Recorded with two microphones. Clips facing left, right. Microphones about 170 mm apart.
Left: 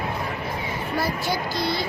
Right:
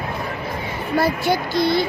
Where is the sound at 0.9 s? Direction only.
60° right (ahead or behind).